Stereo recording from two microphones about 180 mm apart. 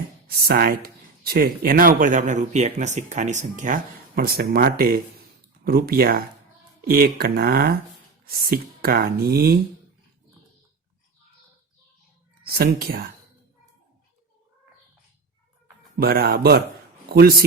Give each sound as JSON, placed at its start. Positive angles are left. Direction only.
{"t": 0.3, "sound": "speech", "side_deg": -55}
{"t": 12.4, "sound": "speech", "side_deg": -60}
{"t": 16.0, "sound": "a man's voice", "side_deg": -55}